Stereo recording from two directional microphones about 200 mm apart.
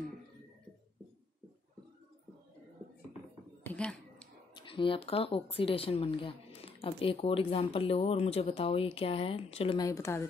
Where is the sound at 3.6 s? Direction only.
5° left (ahead or behind).